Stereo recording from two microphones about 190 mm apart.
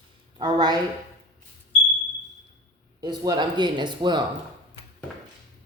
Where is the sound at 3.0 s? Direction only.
20° right (ahead or behind).